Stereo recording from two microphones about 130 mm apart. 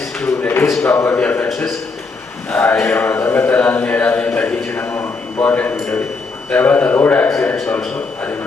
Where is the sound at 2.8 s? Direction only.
15° left (ahead or behind).